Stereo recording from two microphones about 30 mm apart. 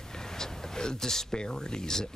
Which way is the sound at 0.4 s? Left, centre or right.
Centre.